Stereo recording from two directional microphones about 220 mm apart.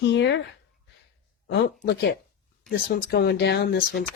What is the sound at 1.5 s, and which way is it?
Speech, 50° left (ahead or behind).